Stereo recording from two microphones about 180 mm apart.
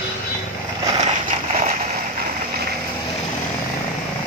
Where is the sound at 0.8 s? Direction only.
40° right (ahead or behind).